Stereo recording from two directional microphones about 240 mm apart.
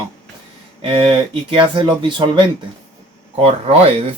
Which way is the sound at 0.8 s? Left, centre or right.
Right.